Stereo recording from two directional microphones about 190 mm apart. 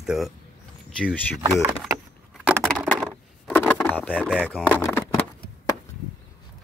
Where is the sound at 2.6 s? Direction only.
Centre (ahead or behind).